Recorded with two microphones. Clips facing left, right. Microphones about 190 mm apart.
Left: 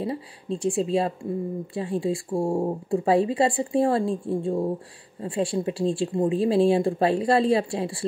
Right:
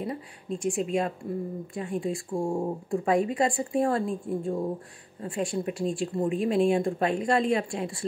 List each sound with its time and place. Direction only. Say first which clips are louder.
0.0 s speech: left 4 dB; 30° left (ahead or behind)